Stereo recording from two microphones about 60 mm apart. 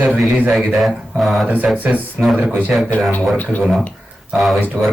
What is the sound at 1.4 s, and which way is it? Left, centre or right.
Speech, right.